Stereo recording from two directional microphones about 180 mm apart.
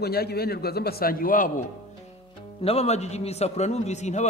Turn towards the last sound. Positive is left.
turn(degrees=40)  # may be behind; listen again after turning